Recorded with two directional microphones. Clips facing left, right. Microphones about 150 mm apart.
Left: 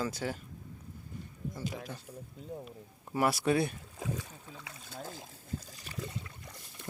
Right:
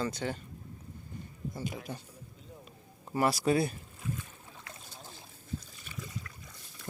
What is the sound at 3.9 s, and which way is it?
Boat, 90° left.